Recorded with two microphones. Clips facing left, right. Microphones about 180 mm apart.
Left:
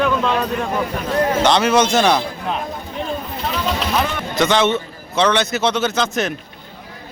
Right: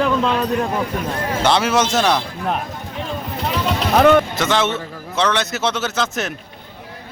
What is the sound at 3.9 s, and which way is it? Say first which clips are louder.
Speech: right 9 dB; 55° right (ahead or behind).